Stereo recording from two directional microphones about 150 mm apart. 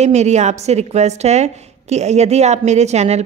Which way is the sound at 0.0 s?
50° right (ahead or behind).